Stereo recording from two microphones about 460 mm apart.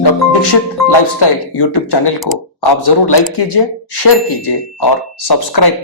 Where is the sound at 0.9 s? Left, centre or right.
Left.